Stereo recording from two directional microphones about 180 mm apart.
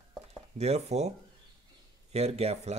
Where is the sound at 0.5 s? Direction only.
35° right (ahead or behind).